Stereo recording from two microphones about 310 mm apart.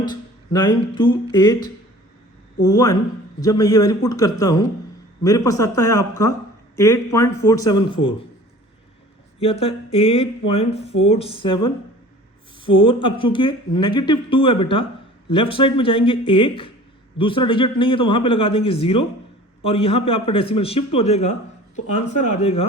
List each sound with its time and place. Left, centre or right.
0.0 s speech: centre
2.6 s speech: centre
9.4 s speech: centre
21.8 s speech: left
22.3 s speech: centre